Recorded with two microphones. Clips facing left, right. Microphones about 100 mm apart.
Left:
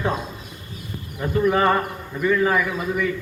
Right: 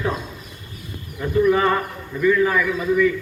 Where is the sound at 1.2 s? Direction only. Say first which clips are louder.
Right 2 dB; 25° left (ahead or behind).